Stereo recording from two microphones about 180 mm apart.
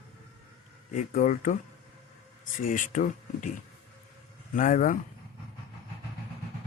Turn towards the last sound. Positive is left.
turn(degrees=45)  # may be behind; listen again after turning